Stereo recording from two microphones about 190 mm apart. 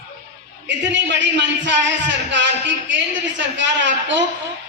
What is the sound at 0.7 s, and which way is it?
A man's voice, 70° right (ahead or behind).